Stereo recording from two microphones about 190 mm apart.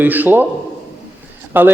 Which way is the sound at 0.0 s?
10° right (ahead or behind).